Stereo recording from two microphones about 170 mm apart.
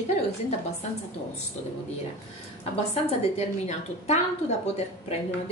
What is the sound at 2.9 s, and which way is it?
A woman's voice, 40° left (ahead or behind).